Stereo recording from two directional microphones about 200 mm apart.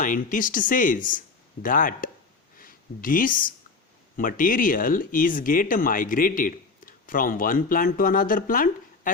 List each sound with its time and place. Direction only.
0.0 s speech: 40° left (ahead or behind)